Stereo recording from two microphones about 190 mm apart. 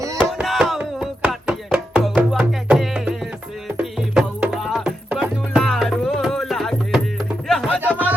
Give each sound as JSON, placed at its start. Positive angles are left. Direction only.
{"t": 0.3, "sound": "chopping", "side_deg": 0}
{"t": 2.4, "sound": "music", "side_deg": -5}
{"t": 7.8, "sound": "a sound", "side_deg": -10}